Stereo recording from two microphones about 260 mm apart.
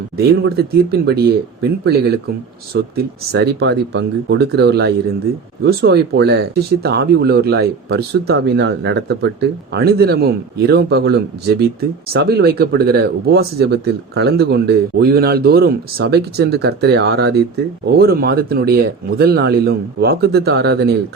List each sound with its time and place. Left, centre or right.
0.2 s speech: right